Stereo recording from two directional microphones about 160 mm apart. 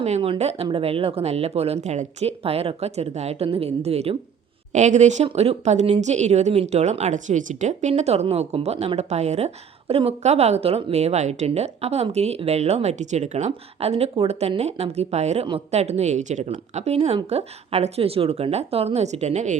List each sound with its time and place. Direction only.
0.0 s a woman's voice: 40° right (ahead or behind)